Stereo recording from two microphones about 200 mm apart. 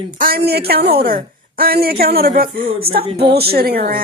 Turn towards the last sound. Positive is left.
turn(degrees=-45)  # may be behind; listen again after turning